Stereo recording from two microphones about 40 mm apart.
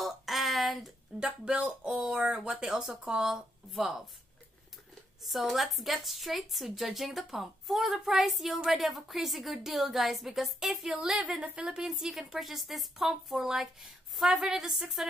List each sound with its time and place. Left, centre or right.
0.0 s a sound: centre
1.2 s speech: right
1.9 s speech: centre
5.2 s a woman's voice: centre
11.1 s speech: right
11.8 s speech: centre
14.7 s a woman's voice: centre